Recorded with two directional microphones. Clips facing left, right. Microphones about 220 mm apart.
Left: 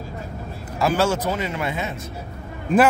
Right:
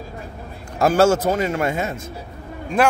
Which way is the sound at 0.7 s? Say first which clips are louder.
Right 5 dB; 45° right (ahead or behind).